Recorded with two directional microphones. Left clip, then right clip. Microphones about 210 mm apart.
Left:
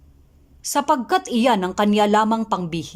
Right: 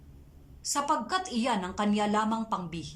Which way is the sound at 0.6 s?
40° left (ahead or behind).